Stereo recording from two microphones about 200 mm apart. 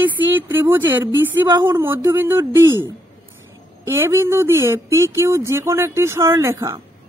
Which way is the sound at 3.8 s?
10° right (ahead or behind).